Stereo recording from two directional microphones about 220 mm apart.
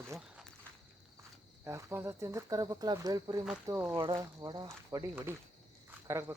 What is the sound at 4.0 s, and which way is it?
Speech, 20° right (ahead or behind).